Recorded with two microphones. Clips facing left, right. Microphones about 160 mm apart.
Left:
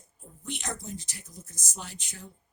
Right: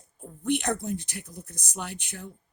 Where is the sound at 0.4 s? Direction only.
60° right (ahead or behind).